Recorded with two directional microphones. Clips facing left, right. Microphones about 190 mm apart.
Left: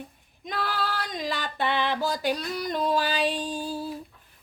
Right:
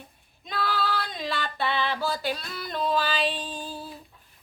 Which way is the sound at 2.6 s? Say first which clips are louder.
Even; 15° left (ahead or behind).